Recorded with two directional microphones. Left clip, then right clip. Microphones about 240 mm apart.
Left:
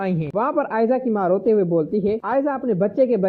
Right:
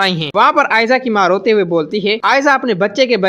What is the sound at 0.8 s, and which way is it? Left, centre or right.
Speech, right.